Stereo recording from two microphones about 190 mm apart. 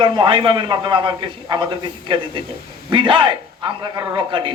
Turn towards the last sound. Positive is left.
turn(degrees=-25)  # may be behind; listen again after turning